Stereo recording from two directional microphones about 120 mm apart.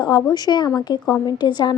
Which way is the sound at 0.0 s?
35° left (ahead or behind).